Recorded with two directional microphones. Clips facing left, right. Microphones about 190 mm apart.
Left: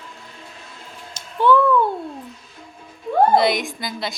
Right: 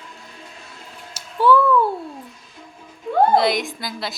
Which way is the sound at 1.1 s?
5° right (ahead or behind).